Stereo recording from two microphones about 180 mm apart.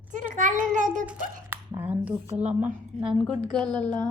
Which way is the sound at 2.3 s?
35° right (ahead or behind).